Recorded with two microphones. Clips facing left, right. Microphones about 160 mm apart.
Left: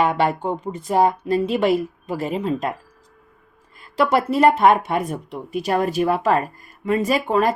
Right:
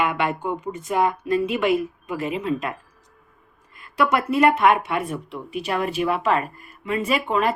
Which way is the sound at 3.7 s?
30° left (ahead or behind).